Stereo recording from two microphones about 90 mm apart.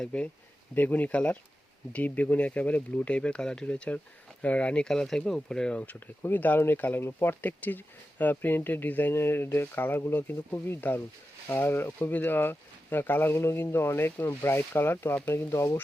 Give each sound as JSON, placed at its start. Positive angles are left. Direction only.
{"t": 0.0, "sound": "speech", "side_deg": 15}